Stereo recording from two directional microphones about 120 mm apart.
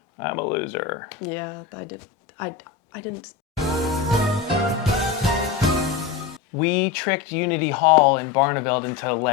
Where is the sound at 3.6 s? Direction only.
Centre (ahead or behind).